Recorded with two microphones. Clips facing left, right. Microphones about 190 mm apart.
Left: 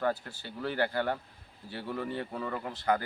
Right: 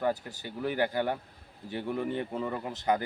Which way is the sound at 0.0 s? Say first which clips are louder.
Right 1 dB; 15° right (ahead or behind).